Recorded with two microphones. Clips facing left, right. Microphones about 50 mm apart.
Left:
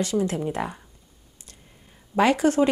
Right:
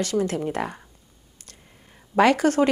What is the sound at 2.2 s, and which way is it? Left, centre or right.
Speech, right.